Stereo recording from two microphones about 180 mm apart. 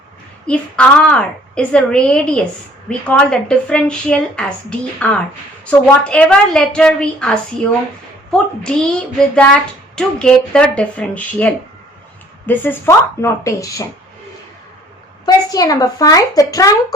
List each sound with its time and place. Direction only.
0.4 s a woman's voice: 5° left (ahead or behind)
15.3 s a woman's voice: 20° left (ahead or behind)